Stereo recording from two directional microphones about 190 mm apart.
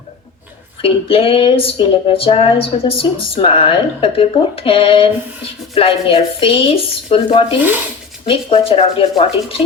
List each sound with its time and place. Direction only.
0.8 s speech: 30° left (ahead or behind)